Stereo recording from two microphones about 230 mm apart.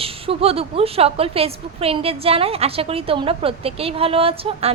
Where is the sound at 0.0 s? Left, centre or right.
Right.